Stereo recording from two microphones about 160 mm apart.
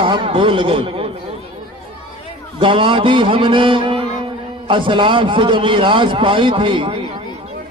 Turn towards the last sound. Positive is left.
turn(degrees=-30)  # may be behind; listen again after turning